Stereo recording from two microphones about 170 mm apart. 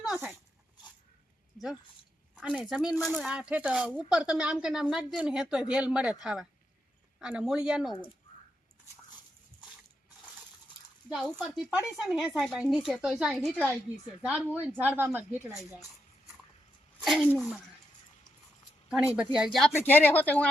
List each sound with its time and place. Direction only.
0.0 s dog: 5° right (ahead or behind)
2.4 s speech: 5° right (ahead or behind)
11.1 s speech: centre (ahead or behind)
17.0 s speech: centre (ahead or behind)
19.1 s speech: 5° right (ahead or behind)
19.5 s speech: 10° left (ahead or behind)